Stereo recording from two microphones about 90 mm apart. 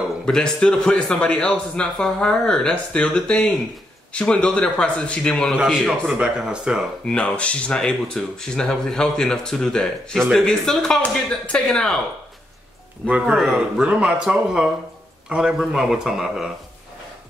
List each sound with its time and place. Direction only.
0.2 s a man's voice: 5° left (ahead or behind)
5.6 s speech: 5° right (ahead or behind)
7.1 s a man's voice: 10° left (ahead or behind)
13.0 s speech: 5° left (ahead or behind)
13.5 s speech: 10° right (ahead or behind)